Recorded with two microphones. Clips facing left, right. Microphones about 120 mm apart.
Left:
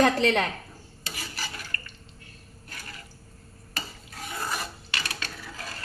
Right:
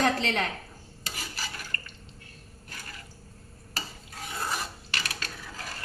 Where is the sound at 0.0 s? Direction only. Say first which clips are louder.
Left 5 dB; 65° left (ahead or behind).